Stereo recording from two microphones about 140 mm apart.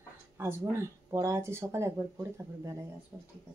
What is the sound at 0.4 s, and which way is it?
A woman's voice, 20° right (ahead or behind).